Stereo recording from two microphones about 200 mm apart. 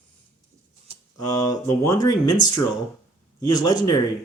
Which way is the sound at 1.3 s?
15° left (ahead or behind).